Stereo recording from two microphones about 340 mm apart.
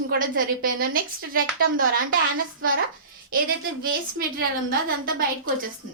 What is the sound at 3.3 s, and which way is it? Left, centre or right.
Speech, right.